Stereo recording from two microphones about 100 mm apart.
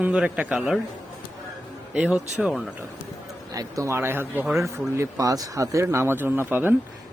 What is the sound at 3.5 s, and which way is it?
Speech, 35° right (ahead or behind).